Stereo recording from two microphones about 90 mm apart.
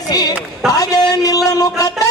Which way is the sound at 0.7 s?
45° left (ahead or behind).